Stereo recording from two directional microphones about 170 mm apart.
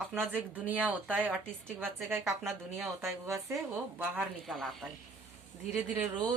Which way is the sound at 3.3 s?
15° right (ahead or behind).